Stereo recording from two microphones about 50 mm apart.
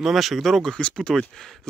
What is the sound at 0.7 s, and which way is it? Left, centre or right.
Speech, centre.